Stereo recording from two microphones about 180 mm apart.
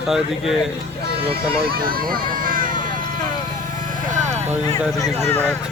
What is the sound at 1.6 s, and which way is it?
Speech, 55° right (ahead or behind).